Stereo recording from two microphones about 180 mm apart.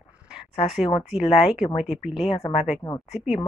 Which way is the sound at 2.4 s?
20° left (ahead or behind).